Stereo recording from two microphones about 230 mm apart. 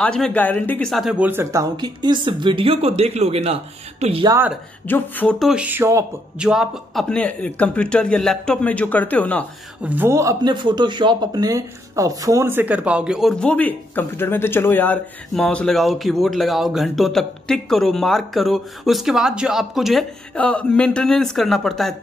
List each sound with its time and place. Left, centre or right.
0.0 s speech: centre; by 4.4 s right
4.8 s speech: centre
6.5 s speech: centre
9.8 s speech: centre